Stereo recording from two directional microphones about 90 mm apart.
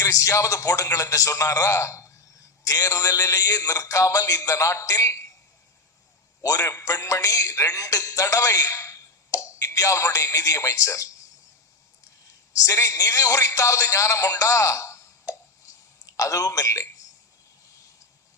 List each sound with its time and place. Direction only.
0.0 s speech: 35° left (ahead or behind)
6.4 s a man's voice: 35° left (ahead or behind)
12.6 s speech: 35° left (ahead or behind)
16.0 s speech: 35° left (ahead or behind)